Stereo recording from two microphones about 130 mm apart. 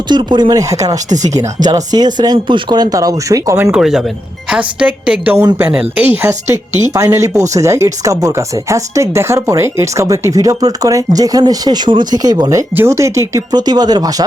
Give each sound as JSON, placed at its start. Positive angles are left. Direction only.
{"t": 0.1, "sound": "speech", "side_deg": -35}
{"t": 3.7, "sound": "a woman's voice", "side_deg": -5}
{"t": 5.4, "sound": "speech", "side_deg": -20}